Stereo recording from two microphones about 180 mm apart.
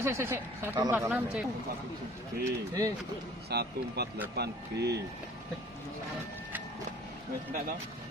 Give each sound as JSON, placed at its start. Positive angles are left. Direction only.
{"t": 0.0, "sound": "speech", "side_deg": -15}
{"t": 2.4, "sound": "speech", "side_deg": -20}
{"t": 3.4, "sound": "speech", "side_deg": -65}